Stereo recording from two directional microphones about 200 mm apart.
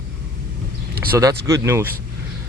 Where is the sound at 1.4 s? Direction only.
15° right (ahead or behind).